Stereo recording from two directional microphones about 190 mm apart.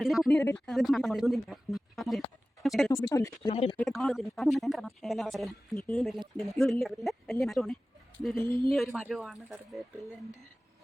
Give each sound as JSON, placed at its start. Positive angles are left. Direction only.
{"t": 0.0, "sound": "speech", "side_deg": 0}
{"t": 2.9, "sound": "speech", "side_deg": 15}
{"t": 3.4, "sound": "speech", "side_deg": 30}
{"t": 3.8, "sound": "speech", "side_deg": 0}
{"t": 8.4, "sound": "speech", "side_deg": 15}
{"t": 8.7, "sound": "speech", "side_deg": 0}